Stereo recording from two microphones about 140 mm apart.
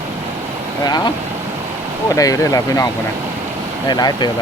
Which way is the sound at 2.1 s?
25° left (ahead or behind).